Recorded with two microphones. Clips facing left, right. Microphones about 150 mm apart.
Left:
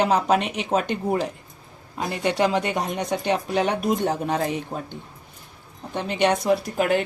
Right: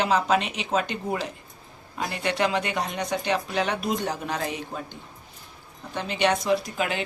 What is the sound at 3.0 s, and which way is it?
Speech, 45° left (ahead or behind).